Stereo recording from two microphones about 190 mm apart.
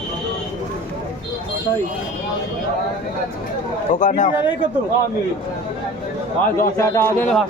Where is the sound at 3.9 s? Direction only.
40° left (ahead or behind).